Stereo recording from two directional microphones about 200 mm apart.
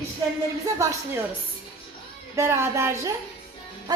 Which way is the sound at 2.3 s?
15° right (ahead or behind).